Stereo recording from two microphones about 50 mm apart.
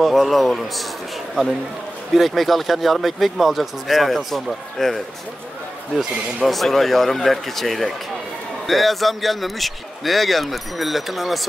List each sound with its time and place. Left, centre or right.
0.0 s speech: centre
2.1 s speech: centre